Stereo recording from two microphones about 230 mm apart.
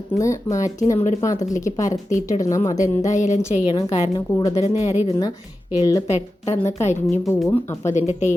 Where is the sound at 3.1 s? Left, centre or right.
Left.